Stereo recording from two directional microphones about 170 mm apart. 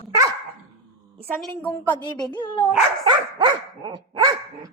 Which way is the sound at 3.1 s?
30° right (ahead or behind).